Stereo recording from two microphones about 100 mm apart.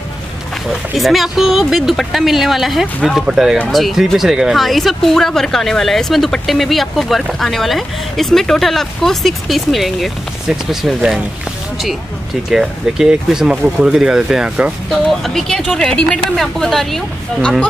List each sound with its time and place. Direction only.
0.7 s speech: centre (ahead or behind)
12.4 s speech: 5° right (ahead or behind)